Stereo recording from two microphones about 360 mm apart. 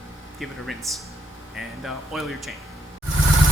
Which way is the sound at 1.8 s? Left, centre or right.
Centre.